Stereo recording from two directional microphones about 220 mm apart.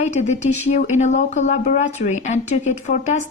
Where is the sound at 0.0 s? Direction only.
30° left (ahead or behind).